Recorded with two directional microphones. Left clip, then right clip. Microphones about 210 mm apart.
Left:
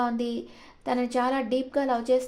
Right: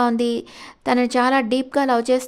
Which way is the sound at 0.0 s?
40° right (ahead or behind).